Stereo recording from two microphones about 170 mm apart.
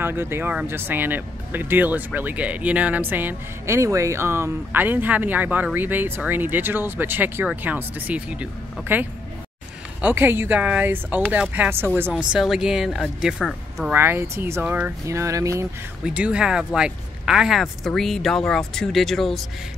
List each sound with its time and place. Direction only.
0.0 s speech: 15° right (ahead or behind)
10.0 s speech: 10° right (ahead or behind)
13.9 s speech: 15° right (ahead or behind)
16.0 s speech: 5° right (ahead or behind)